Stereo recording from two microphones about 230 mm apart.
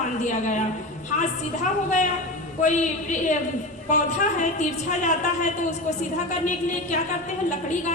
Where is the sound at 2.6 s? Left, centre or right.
Left.